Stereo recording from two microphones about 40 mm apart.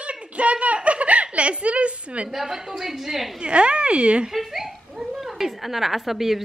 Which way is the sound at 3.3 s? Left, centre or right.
Right.